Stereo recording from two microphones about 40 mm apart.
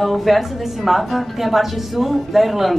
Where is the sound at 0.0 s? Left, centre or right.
Centre.